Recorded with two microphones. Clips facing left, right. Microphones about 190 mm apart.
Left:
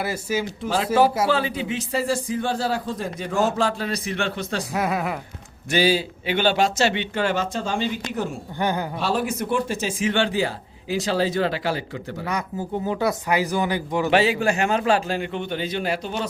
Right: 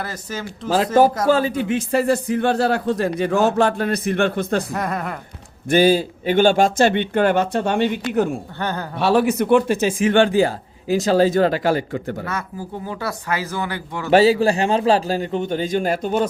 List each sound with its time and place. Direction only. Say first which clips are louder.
0.0 s speech: left 4 dB; 10° left (ahead or behind)
1.3 s speech: right 6 dB; 45° right (ahead or behind)
4.7 s speech: left 1 dB; 5° left (ahead or behind)
5.7 s speech: right 5 dB; 50° right (ahead or behind)
8.5 s speech: left 2 dB; 15° left (ahead or behind)
9.0 s speech: right 7 dB; 65° right (ahead or behind); by 11.8 s 45° right (ahead or behind)
12.2 s speech: left 1 dB; 20° left (ahead or behind)
14.1 s a man's voice: right 7 dB; 35° right (ahead or behind)